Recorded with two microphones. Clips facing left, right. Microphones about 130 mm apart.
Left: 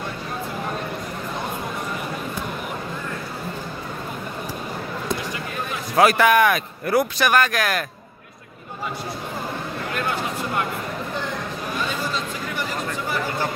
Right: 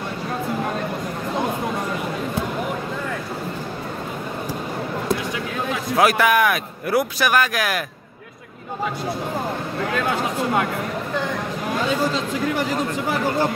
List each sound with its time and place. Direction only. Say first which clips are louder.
5.9 s speech: left 1 dB; centre (ahead or behind)
9.9 s a sound: right 3 dB; 90° right
11.8 s chatter: right 6 dB; 90° right